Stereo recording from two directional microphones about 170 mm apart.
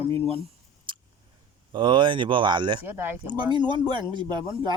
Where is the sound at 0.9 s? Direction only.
30° right (ahead or behind).